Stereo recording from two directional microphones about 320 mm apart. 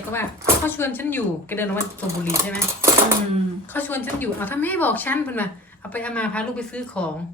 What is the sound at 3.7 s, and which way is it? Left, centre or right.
Speech, centre.